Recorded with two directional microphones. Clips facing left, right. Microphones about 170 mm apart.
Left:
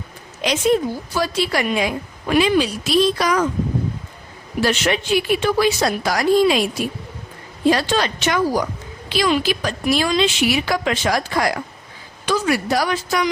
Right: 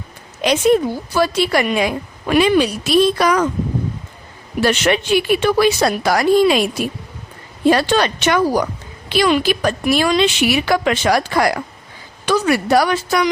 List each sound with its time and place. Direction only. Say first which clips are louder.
0.4 s a woman's voice: right 4 dB; 60° right (ahead or behind)
4.6 s a woman's voice: right 3 dB; 65° right (ahead or behind)
7.7 s a woman's voice: right 3 dB; 65° right (ahead or behind)